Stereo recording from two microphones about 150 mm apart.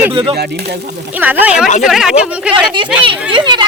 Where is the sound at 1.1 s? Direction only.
10° right (ahead or behind).